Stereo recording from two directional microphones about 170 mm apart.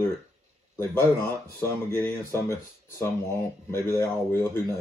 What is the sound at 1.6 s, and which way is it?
Speech, 15° left (ahead or behind).